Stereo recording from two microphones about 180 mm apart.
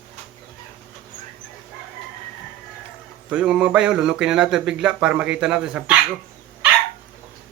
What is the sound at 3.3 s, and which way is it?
Speech, 5° right (ahead or behind).